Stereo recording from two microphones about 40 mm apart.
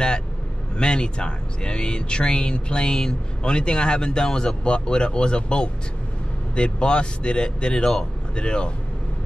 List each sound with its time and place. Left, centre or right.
0.7 s speech: left